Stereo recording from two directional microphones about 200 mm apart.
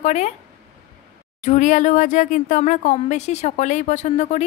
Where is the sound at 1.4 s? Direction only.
35° left (ahead or behind).